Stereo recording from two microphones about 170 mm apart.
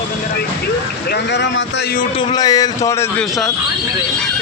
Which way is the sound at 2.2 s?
25° left (ahead or behind).